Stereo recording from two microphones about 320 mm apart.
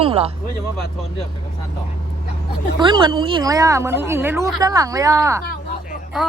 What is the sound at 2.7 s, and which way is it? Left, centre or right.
A woman's voice, centre.